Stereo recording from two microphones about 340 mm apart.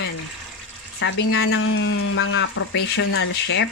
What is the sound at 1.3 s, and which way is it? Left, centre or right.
Speech, left.